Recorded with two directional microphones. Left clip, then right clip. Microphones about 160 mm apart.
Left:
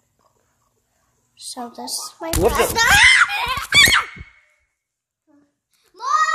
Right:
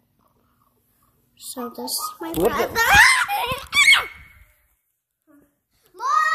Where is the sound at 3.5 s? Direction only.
90° left.